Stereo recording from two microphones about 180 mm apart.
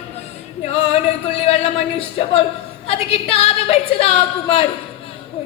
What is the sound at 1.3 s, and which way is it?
A woman's voice, 35° left (ahead or behind).